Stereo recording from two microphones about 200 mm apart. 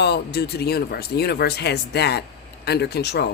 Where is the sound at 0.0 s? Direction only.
55° left (ahead or behind).